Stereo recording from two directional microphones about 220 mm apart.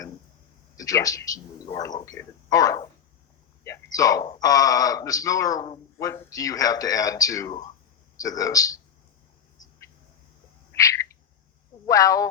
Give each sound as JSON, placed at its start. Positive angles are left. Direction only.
{"t": 0.8, "sound": "speech", "side_deg": 15}
{"t": 10.7, "sound": "bird", "side_deg": 15}
{"t": 11.9, "sound": "speech", "side_deg": 15}